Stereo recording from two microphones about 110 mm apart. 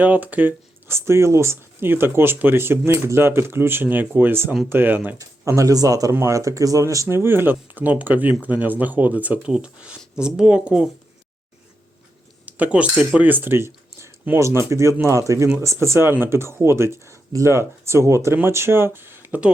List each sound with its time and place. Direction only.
0.0 s speech: 15° right (ahead or behind)
5.2 s speech: 30° right (ahead or behind); by 10.8 s 10° right (ahead or behind)
12.5 s speech: 15° right (ahead or behind)